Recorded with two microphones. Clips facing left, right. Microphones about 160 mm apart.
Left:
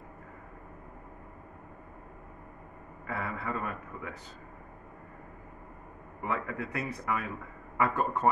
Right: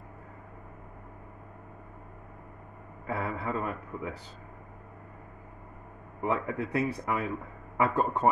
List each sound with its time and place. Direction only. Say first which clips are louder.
3.1 s a man's voice: right 3 dB; 30° right (ahead or behind)
6.2 s a man's voice: right 4 dB; 30° right (ahead or behind)